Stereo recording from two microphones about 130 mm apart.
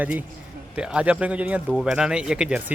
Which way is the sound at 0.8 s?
10° right (ahead or behind).